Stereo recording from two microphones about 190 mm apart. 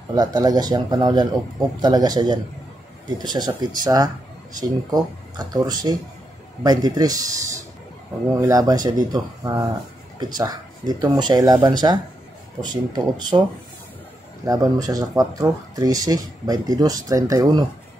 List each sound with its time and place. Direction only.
0.1 s speech: 20° right (ahead or behind)
8.4 s speech: 20° right (ahead or behind)
14.4 s speech: 20° right (ahead or behind)